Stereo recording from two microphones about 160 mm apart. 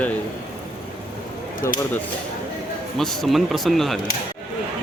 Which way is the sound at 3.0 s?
Centre (ahead or behind).